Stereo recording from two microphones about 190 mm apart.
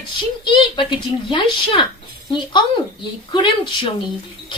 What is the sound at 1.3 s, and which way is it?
Speech, 25° left (ahead or behind).